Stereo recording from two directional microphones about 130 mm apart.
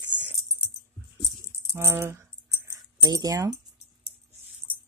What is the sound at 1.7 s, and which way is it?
Keys jangling, 20° right (ahead or behind).